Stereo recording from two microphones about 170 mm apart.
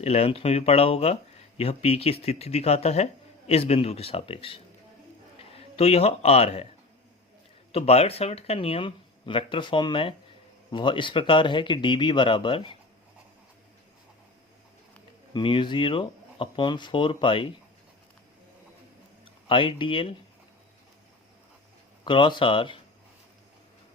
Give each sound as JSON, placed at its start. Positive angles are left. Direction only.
{"t": 0.0, "sound": "a man's voice", "side_deg": 40}
{"t": 7.7, "sound": "speech", "side_deg": 35}
{"t": 15.3, "sound": "speech", "side_deg": 30}
{"t": 19.2, "sound": "speech", "side_deg": 30}
{"t": 22.0, "sound": "speech", "side_deg": 30}